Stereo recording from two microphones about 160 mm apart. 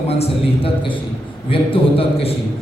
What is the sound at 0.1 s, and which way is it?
A man's voice, 35° left (ahead or behind).